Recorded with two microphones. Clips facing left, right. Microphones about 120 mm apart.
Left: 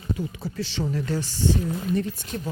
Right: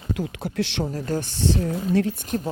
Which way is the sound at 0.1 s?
80° right.